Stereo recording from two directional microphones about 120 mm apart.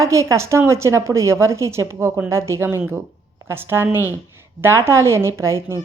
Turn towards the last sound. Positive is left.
turn(degrees=-25)  # may be behind; listen again after turning